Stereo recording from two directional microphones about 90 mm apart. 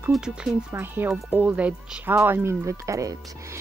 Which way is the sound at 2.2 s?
30° right (ahead or behind).